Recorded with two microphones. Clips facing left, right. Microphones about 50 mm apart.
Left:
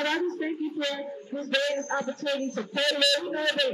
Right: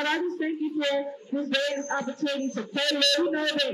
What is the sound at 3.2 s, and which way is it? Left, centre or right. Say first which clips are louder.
Speech: right 5 dB; centre.